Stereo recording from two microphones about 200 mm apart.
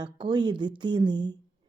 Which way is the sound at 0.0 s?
20° right (ahead or behind).